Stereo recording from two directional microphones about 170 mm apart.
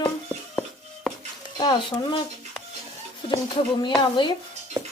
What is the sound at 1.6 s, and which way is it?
Speech, 25° left (ahead or behind).